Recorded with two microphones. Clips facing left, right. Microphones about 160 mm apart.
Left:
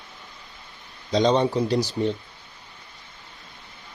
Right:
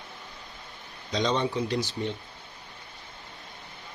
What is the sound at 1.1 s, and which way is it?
Speech, 35° left (ahead or behind).